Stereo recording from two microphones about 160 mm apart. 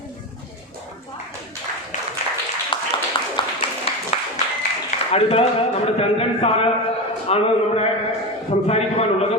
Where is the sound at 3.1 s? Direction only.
25° left (ahead or behind).